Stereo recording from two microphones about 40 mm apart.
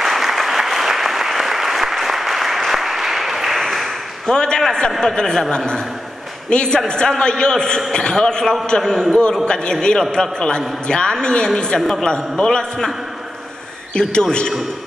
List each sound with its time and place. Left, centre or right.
0.0 s applause: centre
4.3 s a man's voice: centre
6.5 s a man's voice: left
13.9 s a man's voice: left